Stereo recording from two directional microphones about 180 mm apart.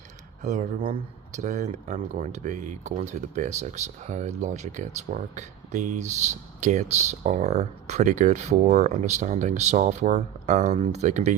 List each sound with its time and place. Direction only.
0.4 s speech: 40° right (ahead or behind)